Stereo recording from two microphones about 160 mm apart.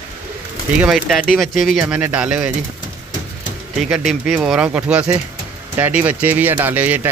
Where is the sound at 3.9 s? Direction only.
Centre (ahead or behind).